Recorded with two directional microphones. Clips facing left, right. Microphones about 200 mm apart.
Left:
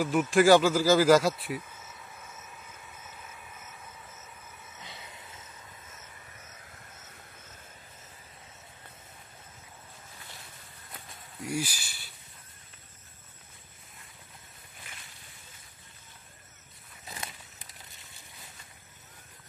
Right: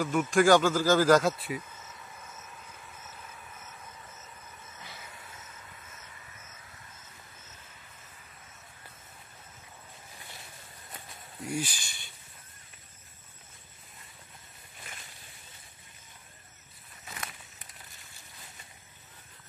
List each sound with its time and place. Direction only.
0.0 s a sound: 5° left (ahead or behind)
4.7 s train: 15° left (ahead or behind)
11.4 s snake: 10° left (ahead or behind)